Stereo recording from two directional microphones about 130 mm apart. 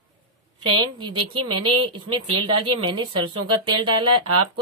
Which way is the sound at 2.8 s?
45° right (ahead or behind).